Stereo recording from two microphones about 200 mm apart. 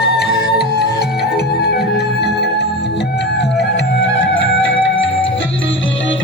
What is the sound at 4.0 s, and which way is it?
Music, 70° left (ahead or behind).